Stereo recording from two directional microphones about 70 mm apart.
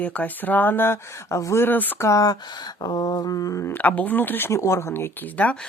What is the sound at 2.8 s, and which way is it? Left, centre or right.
Mantra, left.